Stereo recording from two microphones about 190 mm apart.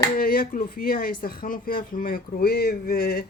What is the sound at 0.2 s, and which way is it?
Speech, 50° left (ahead or behind).